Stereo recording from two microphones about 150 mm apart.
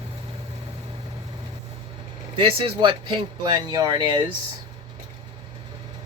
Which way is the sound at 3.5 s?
25° right (ahead or behind).